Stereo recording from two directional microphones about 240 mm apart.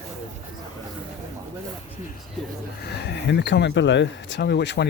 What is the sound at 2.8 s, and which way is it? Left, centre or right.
Speech, left.